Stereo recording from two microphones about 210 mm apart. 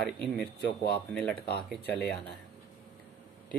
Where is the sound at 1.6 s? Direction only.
5° left (ahead or behind).